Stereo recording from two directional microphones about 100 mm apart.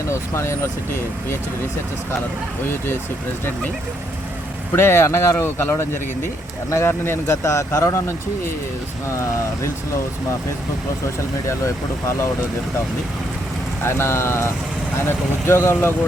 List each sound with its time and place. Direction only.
0.1 s speech: 30° left (ahead or behind)
4.7 s speech: 25° left (ahead or behind)
11.4 s speech: 30° left (ahead or behind)
13.8 s speech: 25° left (ahead or behind)